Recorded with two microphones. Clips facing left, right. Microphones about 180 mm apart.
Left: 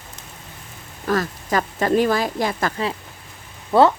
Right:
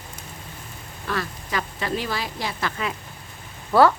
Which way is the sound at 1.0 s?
45° left (ahead or behind).